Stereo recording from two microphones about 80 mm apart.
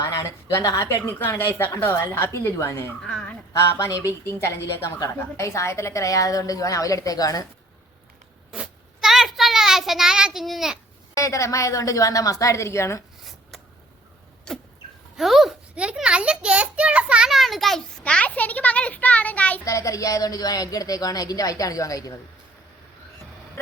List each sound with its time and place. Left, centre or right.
0.0 s speech: left
0.9 s a woman's voice: left
3.0 s a sound: centre
3.5 s a woman's voice: left
9.0 s child singing: centre
10.4 s a child's voice: centre
11.1 s a woman's voice: left
14.5 s vehicle: centre
15.1 s speech: centre
15.7 s a child's voice: centre
18.0 s a child's voice: centre
19.6 s a woman's voice: left